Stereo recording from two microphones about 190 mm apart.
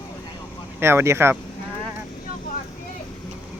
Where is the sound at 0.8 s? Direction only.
15° right (ahead or behind).